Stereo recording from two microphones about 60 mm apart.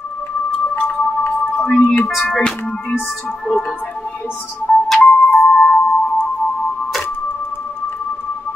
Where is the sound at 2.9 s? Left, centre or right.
Centre.